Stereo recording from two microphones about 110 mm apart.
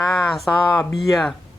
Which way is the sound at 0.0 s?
Centre (ahead or behind).